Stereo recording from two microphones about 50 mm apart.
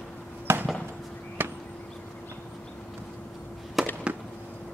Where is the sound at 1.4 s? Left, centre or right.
Right.